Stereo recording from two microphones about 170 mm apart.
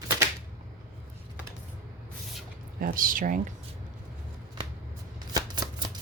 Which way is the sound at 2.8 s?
55° right (ahead or behind).